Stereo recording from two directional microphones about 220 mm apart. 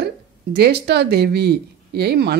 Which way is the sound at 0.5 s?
45° right (ahead or behind).